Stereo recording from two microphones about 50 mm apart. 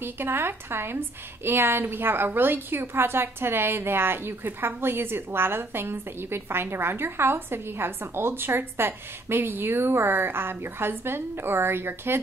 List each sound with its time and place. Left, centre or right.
0.0 s a woman's voice: right